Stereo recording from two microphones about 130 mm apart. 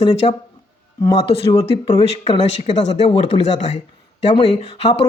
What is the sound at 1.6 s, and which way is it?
Speech, 30° left (ahead or behind).